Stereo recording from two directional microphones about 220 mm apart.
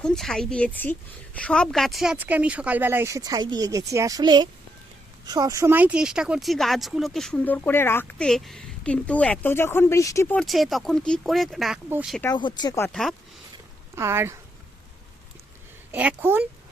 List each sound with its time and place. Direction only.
0.0 s a woman's voice: centre (ahead or behind)
12.2 s speech: 20° left (ahead or behind)
12.9 s speech: centre (ahead or behind)
13.9 s speech: 10° right (ahead or behind)
15.9 s a woman's voice: 5° right (ahead or behind)